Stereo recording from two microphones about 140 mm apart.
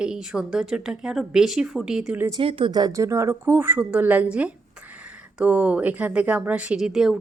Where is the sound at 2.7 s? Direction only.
30° right (ahead or behind); by 7.2 s centre (ahead or behind).